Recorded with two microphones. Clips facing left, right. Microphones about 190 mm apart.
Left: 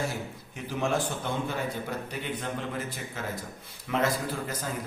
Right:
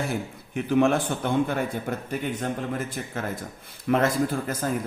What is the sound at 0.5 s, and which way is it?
A man's voice, 60° right (ahead or behind).